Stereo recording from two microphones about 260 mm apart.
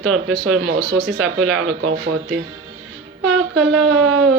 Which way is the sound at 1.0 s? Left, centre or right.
Right.